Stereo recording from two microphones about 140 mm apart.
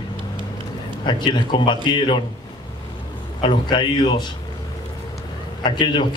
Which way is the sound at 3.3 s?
35° left (ahead or behind).